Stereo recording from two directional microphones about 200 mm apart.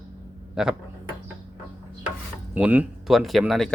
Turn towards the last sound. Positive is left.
turn(degrees=0)  # may be behind; listen again after turning